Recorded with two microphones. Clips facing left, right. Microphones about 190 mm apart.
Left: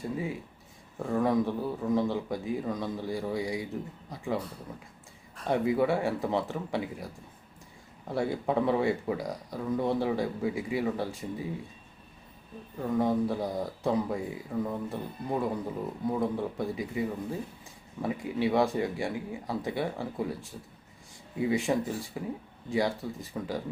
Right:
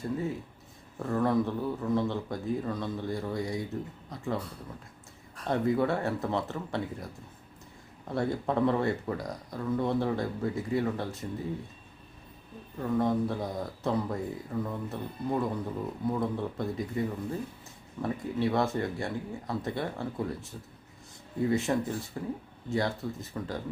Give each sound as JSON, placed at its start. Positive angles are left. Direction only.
{"t": 0.0, "sound": "speech", "side_deg": 10}
{"t": 8.1, "sound": "speech", "side_deg": 10}
{"t": 12.8, "sound": "speech", "side_deg": 10}